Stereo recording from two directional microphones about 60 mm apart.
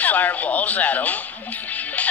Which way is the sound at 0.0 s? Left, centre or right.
Left.